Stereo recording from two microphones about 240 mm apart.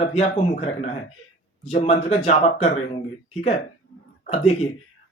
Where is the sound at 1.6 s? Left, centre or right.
Left.